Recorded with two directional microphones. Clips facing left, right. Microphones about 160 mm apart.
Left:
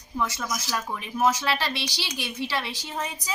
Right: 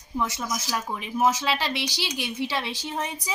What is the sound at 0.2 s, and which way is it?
A woman's voice, 20° right (ahead or behind).